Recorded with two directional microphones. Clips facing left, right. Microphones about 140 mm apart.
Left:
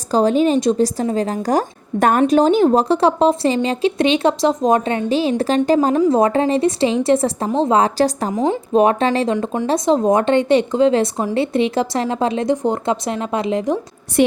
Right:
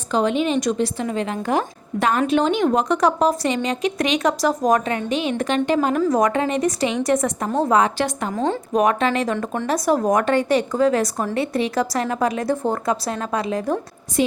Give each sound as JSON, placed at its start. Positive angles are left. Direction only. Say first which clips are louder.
{"t": 0.1, "sound": "a woman's voice", "louder": "left 5 dB", "side_deg": 35}
{"t": 8.3, "sound": "speech", "louder": "left 4 dB", "side_deg": 15}
{"t": 8.7, "sound": "a woman's voice", "louder": "left 4 dB", "side_deg": 30}
{"t": 9.3, "sound": "a woman's voice", "louder": "left 4 dB", "side_deg": 20}
{"t": 14.2, "sound": "a woman's voice", "louder": "left 5 dB", "side_deg": 65}